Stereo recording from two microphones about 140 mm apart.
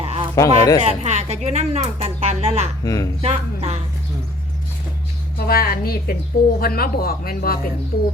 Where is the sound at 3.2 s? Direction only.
50° right (ahead or behind).